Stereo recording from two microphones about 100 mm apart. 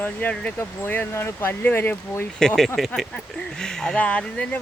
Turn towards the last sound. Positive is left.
turn(degrees=10)  # may be behind; listen again after turning